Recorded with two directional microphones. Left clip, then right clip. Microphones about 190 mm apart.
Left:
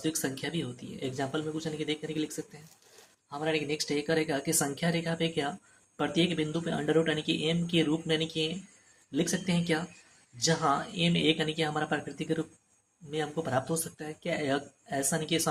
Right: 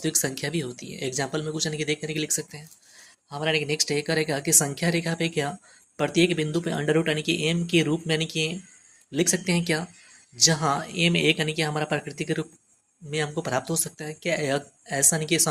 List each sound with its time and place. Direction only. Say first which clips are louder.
0.0 s speech: right 5 dB; 35° right (ahead or behind)